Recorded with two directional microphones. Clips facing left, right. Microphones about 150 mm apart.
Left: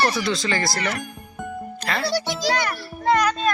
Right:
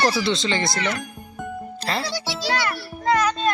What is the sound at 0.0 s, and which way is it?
Speech, 30° right (ahead or behind).